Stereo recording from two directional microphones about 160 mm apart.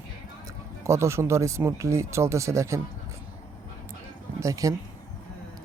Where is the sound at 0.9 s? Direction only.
15° right (ahead or behind).